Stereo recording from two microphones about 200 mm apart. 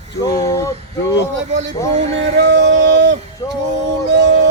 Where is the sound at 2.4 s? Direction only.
60° right (ahead or behind).